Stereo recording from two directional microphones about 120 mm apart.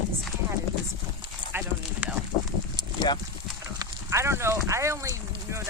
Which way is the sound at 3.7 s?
25° right (ahead or behind).